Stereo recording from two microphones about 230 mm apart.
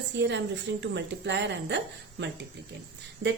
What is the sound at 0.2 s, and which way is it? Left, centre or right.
A woman's voice, right.